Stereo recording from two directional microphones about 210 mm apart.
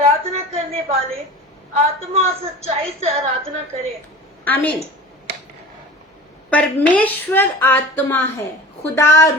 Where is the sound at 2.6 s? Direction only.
30° right (ahead or behind).